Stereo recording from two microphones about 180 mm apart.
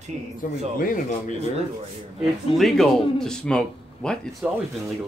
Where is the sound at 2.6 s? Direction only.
Centre (ahead or behind).